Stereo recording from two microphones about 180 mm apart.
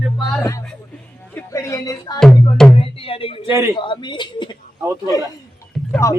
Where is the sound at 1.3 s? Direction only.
15° left (ahead or behind).